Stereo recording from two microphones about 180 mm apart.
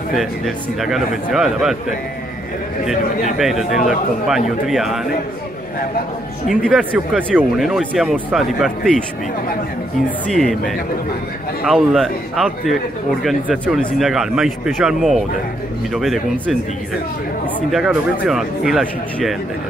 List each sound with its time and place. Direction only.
0.1 s speech: centre (ahead or behind)
3.3 s speech: centre (ahead or behind)
6.5 s speech: 5° left (ahead or behind)
6.8 s speech: 10° right (ahead or behind)
10.3 s speech: 5° left (ahead or behind)
11.6 s speech: centre (ahead or behind)
17.6 s speech: centre (ahead or behind)